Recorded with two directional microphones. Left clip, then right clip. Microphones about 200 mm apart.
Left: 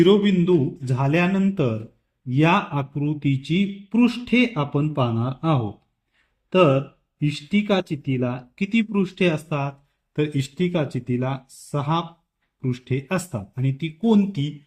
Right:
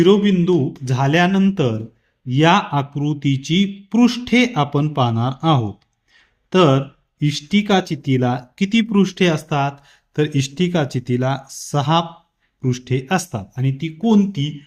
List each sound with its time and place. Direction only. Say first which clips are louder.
0.0 s speech: right 3 dB; 25° right (ahead or behind)